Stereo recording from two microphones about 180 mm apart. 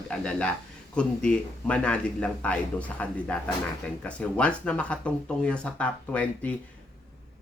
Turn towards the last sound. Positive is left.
turn(degrees=5)  # may be behind; listen again after turning